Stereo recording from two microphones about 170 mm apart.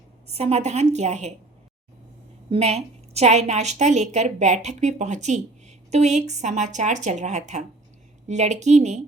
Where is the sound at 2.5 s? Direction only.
40° right (ahead or behind).